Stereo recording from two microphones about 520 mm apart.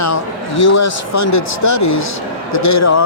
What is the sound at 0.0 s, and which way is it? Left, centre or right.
Speech, left.